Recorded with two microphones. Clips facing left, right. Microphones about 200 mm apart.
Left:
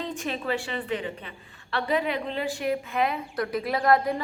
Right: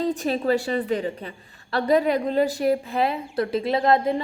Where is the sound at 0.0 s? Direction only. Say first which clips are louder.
Right 8 dB; 35° right (ahead or behind).